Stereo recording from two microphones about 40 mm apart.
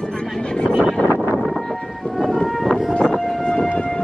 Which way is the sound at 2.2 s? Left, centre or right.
Centre.